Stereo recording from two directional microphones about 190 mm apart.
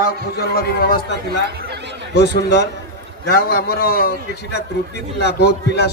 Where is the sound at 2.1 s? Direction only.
60° left (ahead or behind).